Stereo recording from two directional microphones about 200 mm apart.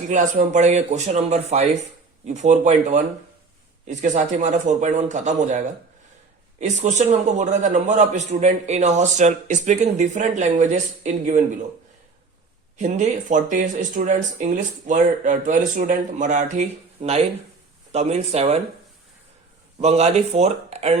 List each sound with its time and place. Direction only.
0.1 s speech: 40° right (ahead or behind)
12.7 s speech: 35° right (ahead or behind)
19.8 s speech: 35° right (ahead or behind)